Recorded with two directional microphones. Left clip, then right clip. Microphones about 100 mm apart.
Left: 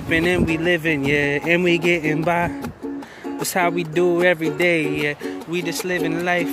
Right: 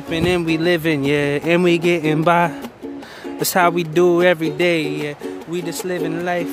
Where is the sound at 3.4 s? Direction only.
85° right; by 4.7 s 65° right (ahead or behind).